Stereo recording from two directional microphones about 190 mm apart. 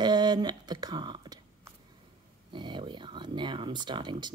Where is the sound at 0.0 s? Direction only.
20° right (ahead or behind).